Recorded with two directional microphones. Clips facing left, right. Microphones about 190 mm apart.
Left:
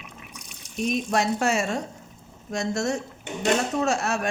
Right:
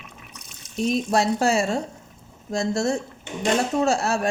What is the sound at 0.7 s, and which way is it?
Speech, 30° right (ahead or behind).